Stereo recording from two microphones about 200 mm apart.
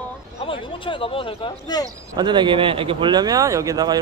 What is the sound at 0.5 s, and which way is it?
Speech, 25° left (ahead or behind).